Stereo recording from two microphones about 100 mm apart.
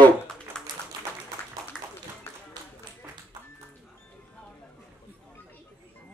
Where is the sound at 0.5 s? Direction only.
5° left (ahead or behind).